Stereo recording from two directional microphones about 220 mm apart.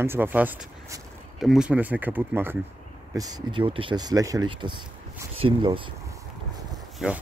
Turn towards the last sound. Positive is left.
turn(degrees=-5)  # may be behind; listen again after turning